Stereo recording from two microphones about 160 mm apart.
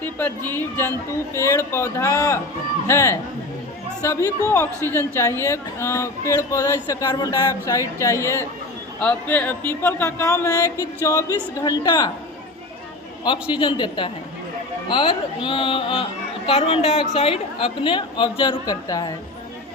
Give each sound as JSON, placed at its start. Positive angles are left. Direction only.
{"t": 0.0, "sound": "speech", "side_deg": 10}
{"t": 13.2, "sound": "a woman's voice", "side_deg": 30}